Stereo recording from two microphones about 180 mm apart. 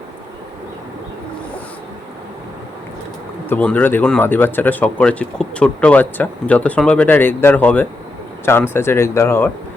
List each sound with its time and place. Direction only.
3.5 s speech: 10° left (ahead or behind)